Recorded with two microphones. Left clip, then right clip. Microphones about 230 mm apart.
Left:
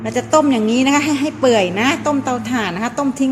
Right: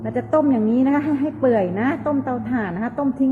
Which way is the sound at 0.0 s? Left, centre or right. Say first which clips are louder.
Left 5 dB; centre.